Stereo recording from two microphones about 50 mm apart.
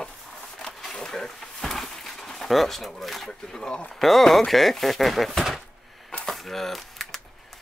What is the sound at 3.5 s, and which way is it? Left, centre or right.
Speech, centre.